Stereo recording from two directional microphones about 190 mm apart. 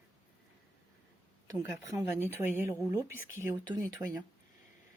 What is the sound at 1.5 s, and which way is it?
Speech, 15° right (ahead or behind).